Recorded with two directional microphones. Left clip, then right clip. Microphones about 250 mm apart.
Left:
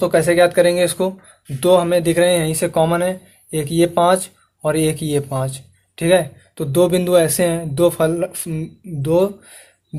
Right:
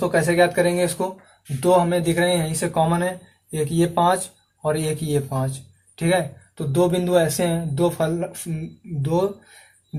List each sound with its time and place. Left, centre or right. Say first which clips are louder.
0.0 s speech: left 5 dB; left